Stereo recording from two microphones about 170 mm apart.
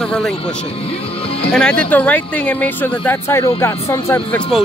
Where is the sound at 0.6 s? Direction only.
35° left (ahead or behind).